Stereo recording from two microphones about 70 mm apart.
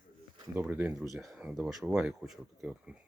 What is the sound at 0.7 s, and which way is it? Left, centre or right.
Speech, right.